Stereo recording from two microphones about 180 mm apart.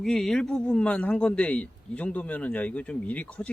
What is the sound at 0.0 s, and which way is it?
A man's voice, centre (ahead or behind).